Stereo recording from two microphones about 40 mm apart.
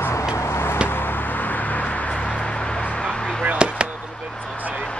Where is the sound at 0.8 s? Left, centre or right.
Left.